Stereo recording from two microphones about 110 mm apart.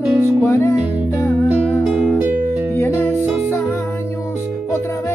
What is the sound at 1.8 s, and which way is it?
Music, 5° right (ahead or behind).